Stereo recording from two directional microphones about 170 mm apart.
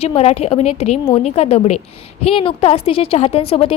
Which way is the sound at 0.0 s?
35° left (ahead or behind).